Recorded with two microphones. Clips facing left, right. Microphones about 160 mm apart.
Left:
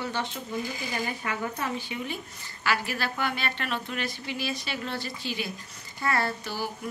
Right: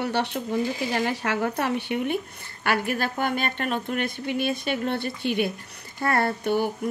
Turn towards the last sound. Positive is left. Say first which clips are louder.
# right 7 dB
turn(degrees=-60)  # may be behind; listen again after turning